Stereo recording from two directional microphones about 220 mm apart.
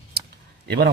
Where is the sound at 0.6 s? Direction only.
50° right (ahead or behind).